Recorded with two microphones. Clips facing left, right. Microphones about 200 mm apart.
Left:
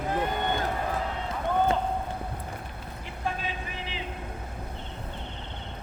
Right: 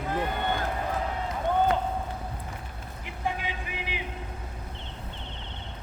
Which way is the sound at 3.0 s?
15° right (ahead or behind).